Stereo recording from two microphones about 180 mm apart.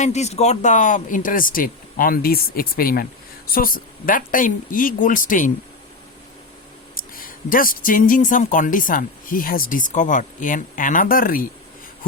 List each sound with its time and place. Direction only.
0.0 s speech: 40° left (ahead or behind)
6.9 s speech: 50° left (ahead or behind)